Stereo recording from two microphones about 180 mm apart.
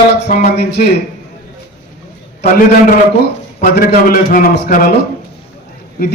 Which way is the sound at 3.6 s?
55° left (ahead or behind).